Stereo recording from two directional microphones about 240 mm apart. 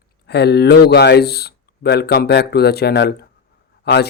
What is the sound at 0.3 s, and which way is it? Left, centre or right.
Speech, left.